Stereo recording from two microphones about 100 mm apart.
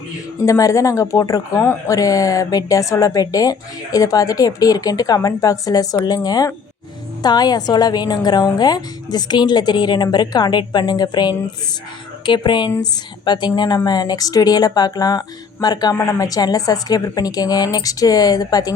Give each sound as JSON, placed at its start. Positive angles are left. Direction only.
{"t": 0.4, "sound": "a woman's voice", "side_deg": 30}